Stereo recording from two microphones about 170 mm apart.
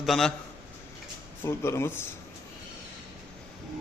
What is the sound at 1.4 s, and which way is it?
Speech, 15° left (ahead or behind).